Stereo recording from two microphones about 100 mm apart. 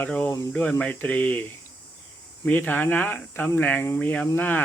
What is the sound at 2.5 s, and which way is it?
Speech, 15° left (ahead or behind).